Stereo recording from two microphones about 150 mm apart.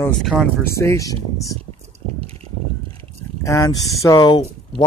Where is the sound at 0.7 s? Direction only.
20° left (ahead or behind).